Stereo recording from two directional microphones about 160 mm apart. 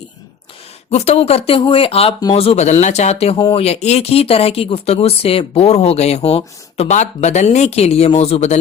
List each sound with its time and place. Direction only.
0.9 s speech: 40° left (ahead or behind)
3.3 s speech: 30° left (ahead or behind)
3.6 s speech: 40° left (ahead or behind)